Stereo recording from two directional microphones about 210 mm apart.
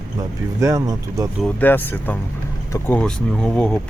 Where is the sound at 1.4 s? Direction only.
5° left (ahead or behind).